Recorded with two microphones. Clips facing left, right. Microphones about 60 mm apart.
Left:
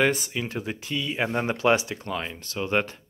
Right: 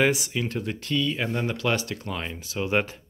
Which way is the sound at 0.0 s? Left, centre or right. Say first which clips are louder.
Right 1 dB; centre.